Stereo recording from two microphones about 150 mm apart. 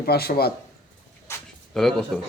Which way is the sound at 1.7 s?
5° left (ahead or behind).